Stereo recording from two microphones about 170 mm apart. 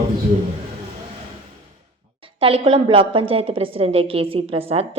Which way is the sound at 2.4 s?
30° right (ahead or behind).